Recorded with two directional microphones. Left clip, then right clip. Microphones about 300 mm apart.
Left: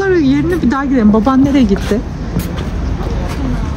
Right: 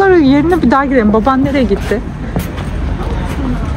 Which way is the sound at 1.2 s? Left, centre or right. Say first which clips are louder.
Even; left.